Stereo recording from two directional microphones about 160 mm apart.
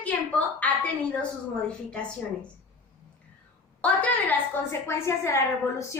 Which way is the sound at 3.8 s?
10° left (ahead or behind).